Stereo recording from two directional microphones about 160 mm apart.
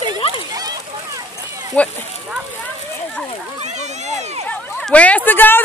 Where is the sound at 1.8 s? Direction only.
10° left (ahead or behind).